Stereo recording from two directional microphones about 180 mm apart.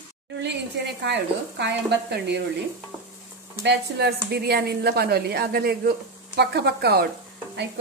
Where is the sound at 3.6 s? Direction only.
70° right (ahead or behind).